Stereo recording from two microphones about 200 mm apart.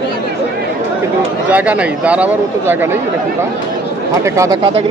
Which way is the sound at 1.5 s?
5° right (ahead or behind).